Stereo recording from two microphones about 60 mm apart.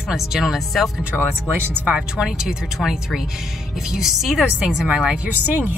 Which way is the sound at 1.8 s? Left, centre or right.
Centre.